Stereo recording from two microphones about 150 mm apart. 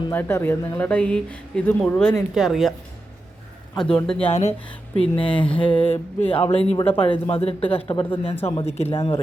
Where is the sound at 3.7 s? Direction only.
5° left (ahead or behind).